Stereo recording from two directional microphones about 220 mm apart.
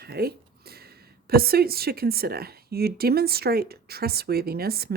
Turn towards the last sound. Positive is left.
turn(degrees=-45)  # may be behind; listen again after turning